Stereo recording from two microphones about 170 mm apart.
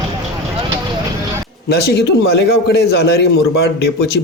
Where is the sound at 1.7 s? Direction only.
70° left (ahead or behind).